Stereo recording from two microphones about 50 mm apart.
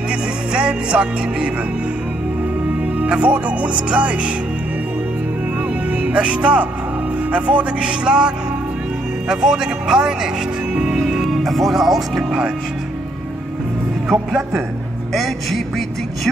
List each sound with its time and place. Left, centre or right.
0.5 s music: centre
3.0 s speech: right
6.0 s speech: right
9.3 s speech: centre
10.7 s music: centre
11.2 s speech: centre
15.1 s music: centre